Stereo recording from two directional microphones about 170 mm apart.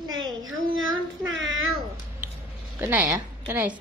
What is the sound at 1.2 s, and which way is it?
Speech, 90° right.